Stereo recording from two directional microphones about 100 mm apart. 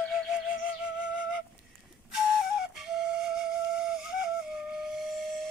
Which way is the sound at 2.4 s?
5° right (ahead or behind).